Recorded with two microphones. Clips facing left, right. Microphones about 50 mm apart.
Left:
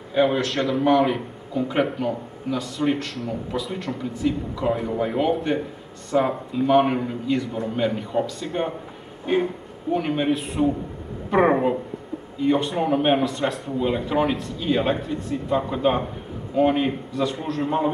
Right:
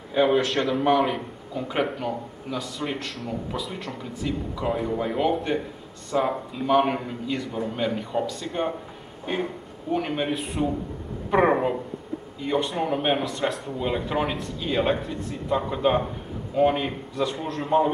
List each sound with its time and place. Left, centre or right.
0.1 s speech: centre
9.2 s a sound: centre
9.9 s speech: centre